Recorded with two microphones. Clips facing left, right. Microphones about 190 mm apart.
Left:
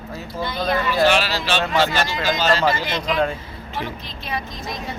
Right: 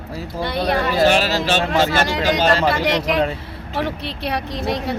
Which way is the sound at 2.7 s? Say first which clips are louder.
Right 4 dB; 65° right (ahead or behind).